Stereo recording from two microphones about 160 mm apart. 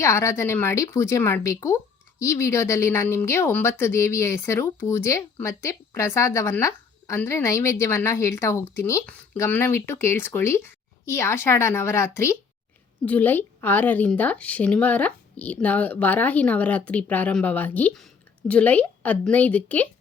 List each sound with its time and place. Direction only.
0.0 s speech: 20° left (ahead or behind)